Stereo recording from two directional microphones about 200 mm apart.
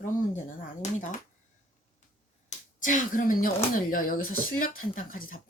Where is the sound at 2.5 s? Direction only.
40° left (ahead or behind).